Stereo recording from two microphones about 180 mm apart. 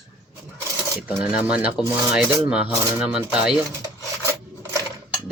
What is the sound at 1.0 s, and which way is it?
Speech, 5° right (ahead or behind).